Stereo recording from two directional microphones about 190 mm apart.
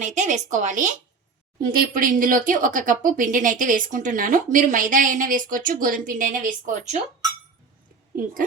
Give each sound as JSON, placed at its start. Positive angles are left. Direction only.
{"t": 0.0, "sound": "a woman's voice", "side_deg": -40}
{"t": 8.1, "sound": "a woman's voice", "side_deg": -45}